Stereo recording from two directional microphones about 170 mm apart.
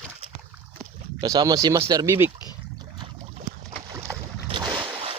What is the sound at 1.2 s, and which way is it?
Speech, 20° right (ahead or behind).